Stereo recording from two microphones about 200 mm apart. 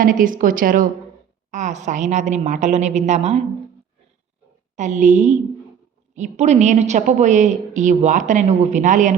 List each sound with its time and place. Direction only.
0.0 s a woman's voice: 45° right (ahead or behind)
4.8 s a woman's voice: 40° right (ahead or behind)